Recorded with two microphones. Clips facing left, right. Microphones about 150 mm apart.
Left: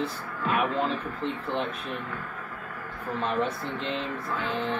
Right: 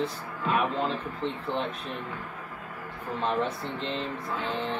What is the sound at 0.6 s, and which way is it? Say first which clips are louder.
Speech: left 2 dB; 5° left (ahead or behind).